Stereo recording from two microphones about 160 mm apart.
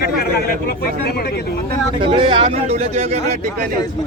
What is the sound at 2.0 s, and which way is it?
Speech, 30° right (ahead or behind).